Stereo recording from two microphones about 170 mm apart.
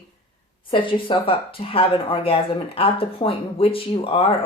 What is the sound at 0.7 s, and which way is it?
Speech, 30° left (ahead or behind).